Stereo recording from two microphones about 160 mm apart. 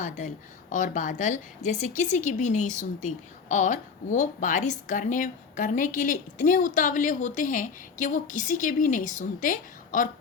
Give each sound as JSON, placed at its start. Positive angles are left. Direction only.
{"t": 0.7, "sound": "a woman's voice", "side_deg": 55}